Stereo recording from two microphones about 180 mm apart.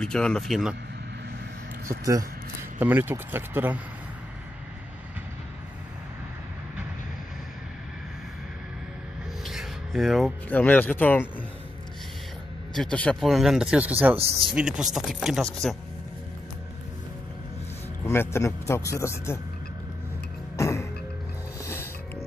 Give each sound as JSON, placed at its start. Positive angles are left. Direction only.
{"t": 0.0, "sound": "speech", "side_deg": 5}
{"t": 1.9, "sound": "speech", "side_deg": -20}
{"t": 9.4, "sound": "speech", "side_deg": 0}
{"t": 12.7, "sound": "speech", "side_deg": 5}
{"t": 14.1, "sound": "speech", "side_deg": -35}
{"t": 14.5, "sound": "speech", "side_deg": -5}
{"t": 18.0, "sound": "a man's voice", "side_deg": 15}
{"t": 20.5, "sound": "music", "side_deg": 15}